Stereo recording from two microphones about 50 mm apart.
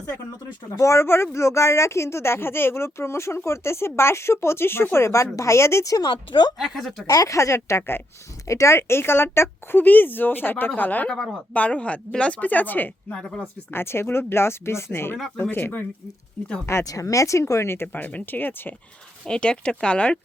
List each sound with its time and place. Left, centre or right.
0.8 s speech: left
1.0 s speech: left
6.6 s speech: centre
7.3 s speech: left
7.8 s speech: left
8.4 s speech: left
9.7 s speech: left
11.1 s speech: centre
11.5 s speech: left
13.7 s speech: left
16.6 s speech: left
17.9 s speech: left
19.2 s speech: centre